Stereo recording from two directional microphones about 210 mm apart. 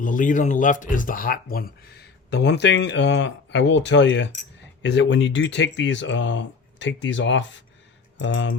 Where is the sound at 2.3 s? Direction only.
55° left (ahead or behind).